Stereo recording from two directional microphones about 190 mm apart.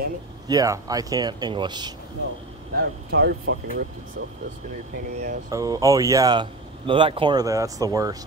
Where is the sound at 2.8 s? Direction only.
60° right (ahead or behind).